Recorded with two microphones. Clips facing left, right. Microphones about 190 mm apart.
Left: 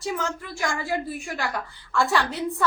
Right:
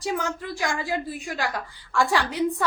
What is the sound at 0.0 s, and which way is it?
Speech, 15° right (ahead or behind).